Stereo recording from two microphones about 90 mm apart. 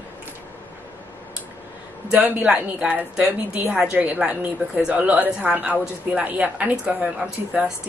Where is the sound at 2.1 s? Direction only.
15° right (ahead or behind).